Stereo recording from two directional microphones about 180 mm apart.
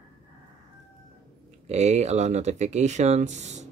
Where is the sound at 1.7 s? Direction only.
40° right (ahead or behind).